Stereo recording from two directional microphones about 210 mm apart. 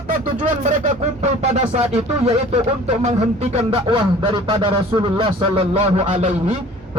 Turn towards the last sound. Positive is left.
turn(degrees=-30)  # may be behind; listen again after turning